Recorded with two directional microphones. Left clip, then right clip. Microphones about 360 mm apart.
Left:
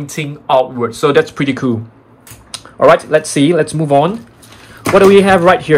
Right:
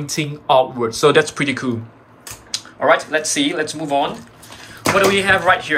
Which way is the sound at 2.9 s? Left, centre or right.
Centre.